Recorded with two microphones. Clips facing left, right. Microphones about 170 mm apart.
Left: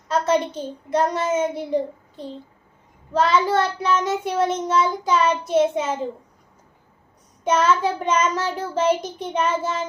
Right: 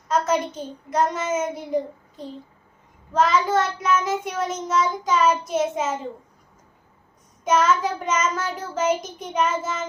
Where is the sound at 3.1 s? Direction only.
30° left (ahead or behind).